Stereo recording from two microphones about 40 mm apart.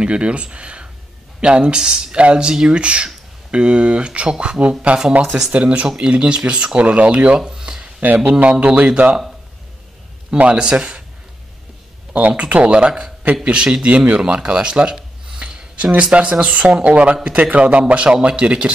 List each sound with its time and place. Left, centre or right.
0.0 s a man's voice: right
7.3 s a sound: centre
8.3 s a man's voice: right
10.3 s a man's voice: right
10.6 s speech: right
12.1 s a man's voice: right
14.4 s speech: centre
15.3 s a sound: right
15.9 s a man's voice: right